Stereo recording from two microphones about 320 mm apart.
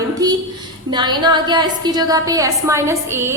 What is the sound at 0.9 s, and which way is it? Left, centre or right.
A woman's voice, centre.